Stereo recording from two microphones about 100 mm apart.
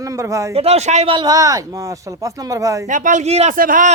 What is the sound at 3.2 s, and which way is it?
Speech, 90° right.